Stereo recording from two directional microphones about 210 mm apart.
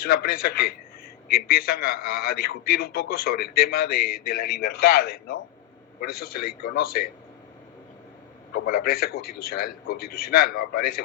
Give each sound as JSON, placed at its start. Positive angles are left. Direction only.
{"t": 0.0, "sound": "a man's voice", "side_deg": 45}
{"t": 8.5, "sound": "a man's voice", "side_deg": 45}